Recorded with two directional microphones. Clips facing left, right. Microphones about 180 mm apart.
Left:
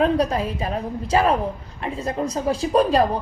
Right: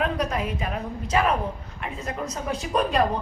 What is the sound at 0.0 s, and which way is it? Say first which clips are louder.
A woman's voice: left 6 dB; 30° left (ahead or behind).